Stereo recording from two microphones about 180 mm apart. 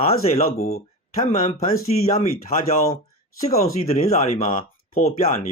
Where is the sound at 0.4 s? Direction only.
55° left (ahead or behind).